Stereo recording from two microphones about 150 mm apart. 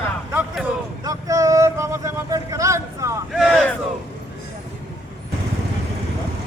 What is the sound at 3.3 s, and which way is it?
Vehicle, centre (ahead or behind).